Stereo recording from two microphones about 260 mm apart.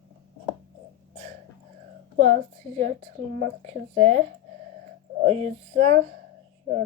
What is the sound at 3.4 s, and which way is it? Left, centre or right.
Speech, right.